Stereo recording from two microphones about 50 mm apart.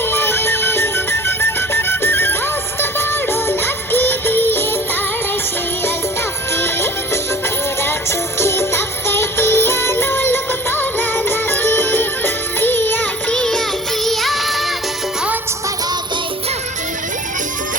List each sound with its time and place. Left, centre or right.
0.0 s music: left
6.6 s music: left
8.4 s music: left
13.3 s music: centre